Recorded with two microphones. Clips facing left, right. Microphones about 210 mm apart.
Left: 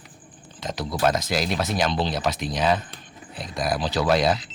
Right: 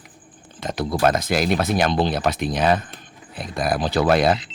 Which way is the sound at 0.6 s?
55° right (ahead or behind).